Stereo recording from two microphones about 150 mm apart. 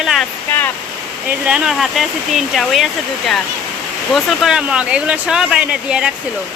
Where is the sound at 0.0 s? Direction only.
Centre (ahead or behind).